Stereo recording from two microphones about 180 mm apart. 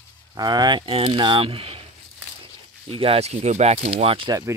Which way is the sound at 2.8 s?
35° right (ahead or behind).